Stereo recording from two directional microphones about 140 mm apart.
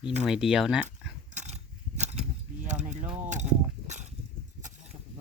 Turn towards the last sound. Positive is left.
turn(degrees=-55)  # may be behind; listen again after turning